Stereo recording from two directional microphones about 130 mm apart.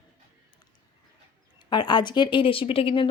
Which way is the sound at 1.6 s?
35° left (ahead or behind).